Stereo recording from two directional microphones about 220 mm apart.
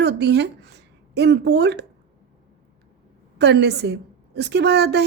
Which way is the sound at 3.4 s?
50° right (ahead or behind).